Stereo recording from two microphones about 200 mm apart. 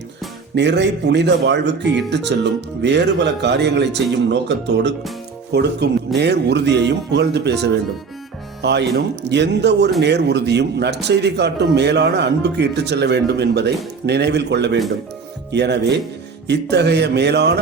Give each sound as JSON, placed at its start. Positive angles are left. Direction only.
{"t": 0.5, "sound": "a man's voice", "side_deg": -60}